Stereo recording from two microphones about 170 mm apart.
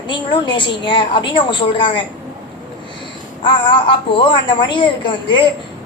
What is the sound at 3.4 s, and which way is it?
A woman's voice, 30° left (ahead or behind).